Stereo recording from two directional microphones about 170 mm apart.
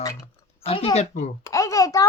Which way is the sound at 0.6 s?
35° left (ahead or behind).